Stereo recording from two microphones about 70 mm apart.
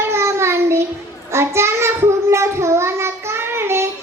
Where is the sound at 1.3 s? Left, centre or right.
Right.